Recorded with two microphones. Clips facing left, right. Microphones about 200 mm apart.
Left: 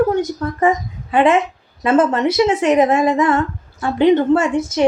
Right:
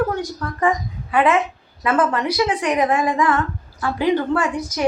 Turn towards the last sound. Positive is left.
turn(degrees=25)  # may be behind; listen again after turning